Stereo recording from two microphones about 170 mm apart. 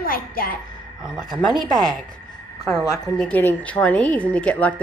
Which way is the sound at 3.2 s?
10° left (ahead or behind).